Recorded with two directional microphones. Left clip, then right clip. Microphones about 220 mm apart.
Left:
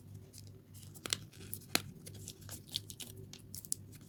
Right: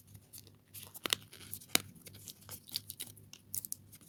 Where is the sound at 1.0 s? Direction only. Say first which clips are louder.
Right 4 dB; 15° right (ahead or behind).